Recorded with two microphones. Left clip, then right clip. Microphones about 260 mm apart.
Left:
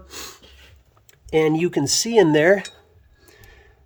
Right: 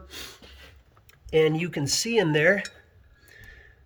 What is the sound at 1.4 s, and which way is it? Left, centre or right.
Speech, centre.